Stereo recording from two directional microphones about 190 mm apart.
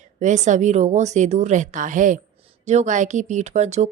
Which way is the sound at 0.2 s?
40° right (ahead or behind).